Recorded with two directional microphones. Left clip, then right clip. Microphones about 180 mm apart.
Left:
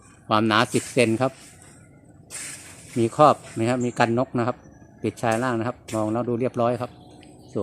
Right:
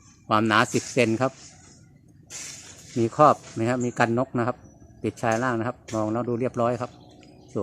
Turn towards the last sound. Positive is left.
turn(degrees=-5)  # may be behind; listen again after turning